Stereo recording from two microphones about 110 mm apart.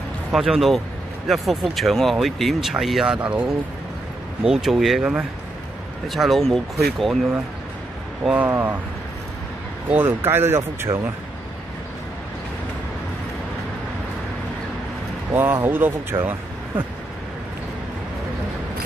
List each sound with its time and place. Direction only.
0.3 s speech: 5° right (ahead or behind)
8.5 s speech: 20° right (ahead or behind)
9.8 s speech: 20° right (ahead or behind)
15.3 s speech: 20° right (ahead or behind)